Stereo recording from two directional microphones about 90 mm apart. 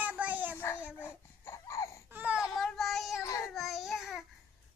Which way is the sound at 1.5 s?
35° left (ahead or behind).